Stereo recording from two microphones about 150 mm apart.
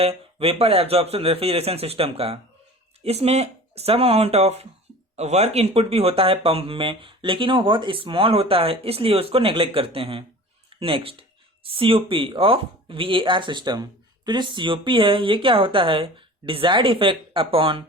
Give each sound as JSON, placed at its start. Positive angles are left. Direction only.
{"t": 0.0, "sound": "speech", "side_deg": -40}